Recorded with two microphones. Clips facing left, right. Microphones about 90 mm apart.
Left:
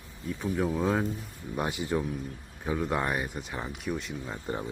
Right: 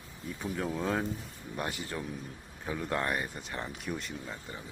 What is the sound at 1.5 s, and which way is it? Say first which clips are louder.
Speech: left 7 dB; 15° left (ahead or behind).